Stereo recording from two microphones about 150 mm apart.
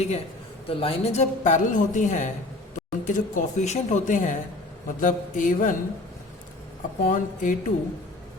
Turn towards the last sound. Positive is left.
turn(degrees=60)  # may be behind; listen again after turning